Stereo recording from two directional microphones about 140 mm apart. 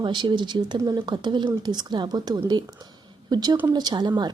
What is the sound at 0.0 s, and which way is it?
Speech, 35° right (ahead or behind).